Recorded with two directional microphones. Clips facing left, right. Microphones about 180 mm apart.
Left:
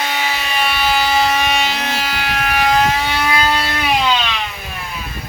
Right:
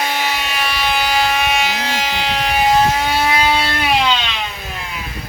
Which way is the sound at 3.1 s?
25° right (ahead or behind).